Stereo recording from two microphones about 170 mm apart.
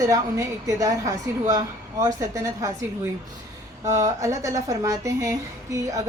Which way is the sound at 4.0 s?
20° right (ahead or behind).